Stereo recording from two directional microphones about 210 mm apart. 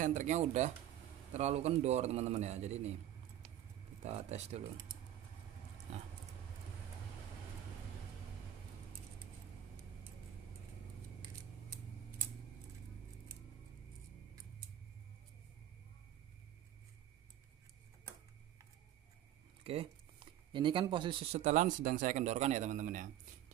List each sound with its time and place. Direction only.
0.0 s a man's voice: 35° right (ahead or behind)
4.0 s a man's voice: 30° right (ahead or behind)
19.6 s speech: 30° right (ahead or behind)
21.4 s a man's voice: 35° right (ahead or behind)